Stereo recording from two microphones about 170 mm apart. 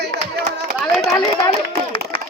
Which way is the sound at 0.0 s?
80° right.